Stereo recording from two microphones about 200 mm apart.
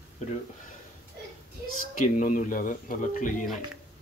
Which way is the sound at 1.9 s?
40° left (ahead or behind).